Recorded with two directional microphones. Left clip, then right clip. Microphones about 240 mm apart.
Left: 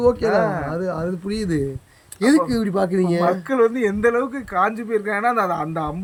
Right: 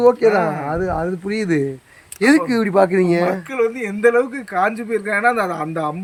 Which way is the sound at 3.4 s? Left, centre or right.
Left.